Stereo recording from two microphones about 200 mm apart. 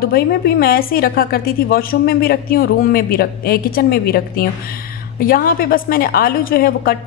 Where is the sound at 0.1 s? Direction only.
50° left (ahead or behind).